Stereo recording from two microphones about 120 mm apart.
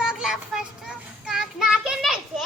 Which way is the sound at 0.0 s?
5° right (ahead or behind).